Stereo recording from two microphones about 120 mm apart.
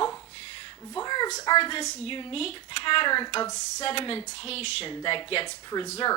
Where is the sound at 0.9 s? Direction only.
35° left (ahead or behind).